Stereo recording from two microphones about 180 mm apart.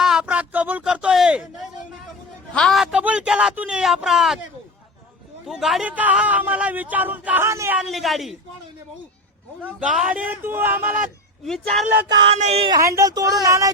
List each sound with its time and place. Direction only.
0.0 s a sound: 5° right (ahead or behind)
2.6 s a man's voice: centre (ahead or behind)
5.5 s speech: centre (ahead or behind)
7.8 s a man's voice: centre (ahead or behind)
9.6 s speech: 10° right (ahead or behind)
11.4 s a man's voice: centre (ahead or behind)
12.0 s speech: 30° right (ahead or behind)
13.0 s speech: 20° right (ahead or behind)